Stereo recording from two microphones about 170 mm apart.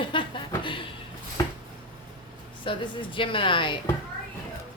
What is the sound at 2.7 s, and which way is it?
A woman's voice, 30° left (ahead or behind).